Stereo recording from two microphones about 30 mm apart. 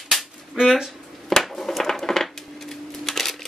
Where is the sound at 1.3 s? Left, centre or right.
Centre.